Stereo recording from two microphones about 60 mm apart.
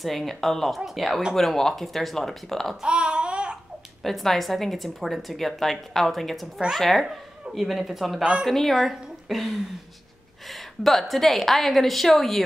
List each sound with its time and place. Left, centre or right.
0.0 s a woman's voice: centre
2.8 s a sound: centre
4.0 s a woman's voice: centre
8.2 s a woman's voice: centre
8.5 s a woman's voice: centre